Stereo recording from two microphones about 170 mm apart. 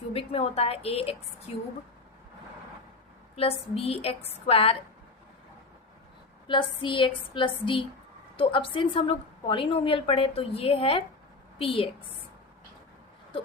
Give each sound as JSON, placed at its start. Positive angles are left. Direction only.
{"t": 0.1, "sound": "a woman's voice", "side_deg": 35}
{"t": 3.3, "sound": "a woman's voice", "side_deg": 35}
{"t": 6.5, "sound": "a woman's voice", "side_deg": 30}